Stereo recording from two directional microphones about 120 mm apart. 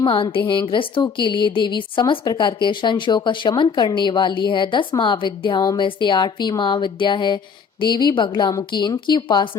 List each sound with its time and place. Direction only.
0.0 s a woman's voice: 45° left (ahead or behind)